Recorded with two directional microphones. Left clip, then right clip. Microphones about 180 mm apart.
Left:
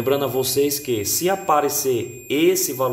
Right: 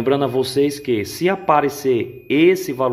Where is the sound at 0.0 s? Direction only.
35° right (ahead or behind).